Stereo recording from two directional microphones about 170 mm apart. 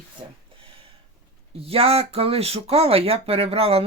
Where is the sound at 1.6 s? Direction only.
35° right (ahead or behind).